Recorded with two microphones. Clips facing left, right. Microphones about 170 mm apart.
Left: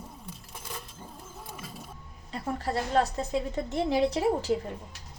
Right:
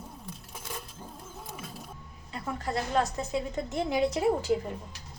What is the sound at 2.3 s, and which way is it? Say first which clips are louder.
A woman's voice: left 2 dB; 35° left (ahead or behind).